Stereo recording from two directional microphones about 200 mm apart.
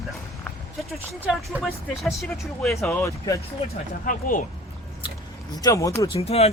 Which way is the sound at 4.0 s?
45° left (ahead or behind).